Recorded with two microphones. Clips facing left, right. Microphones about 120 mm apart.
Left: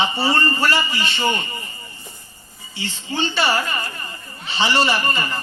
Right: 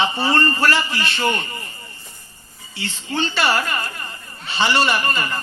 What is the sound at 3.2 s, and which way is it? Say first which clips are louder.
Speech: even; 15° left (ahead or behind).